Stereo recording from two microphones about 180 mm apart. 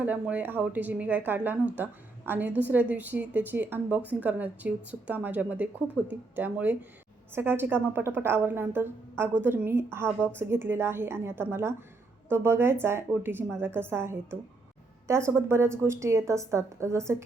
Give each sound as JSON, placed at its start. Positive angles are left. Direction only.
{"t": 0.0, "sound": "speech", "side_deg": -10}